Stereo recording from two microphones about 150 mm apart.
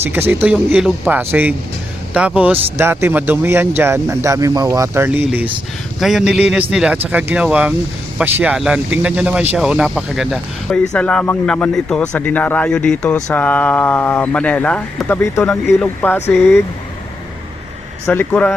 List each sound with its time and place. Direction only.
0.0 s speech: 15° right (ahead or behind)
10.9 s speech: 10° left (ahead or behind)
18.0 s speech: 10° left (ahead or behind)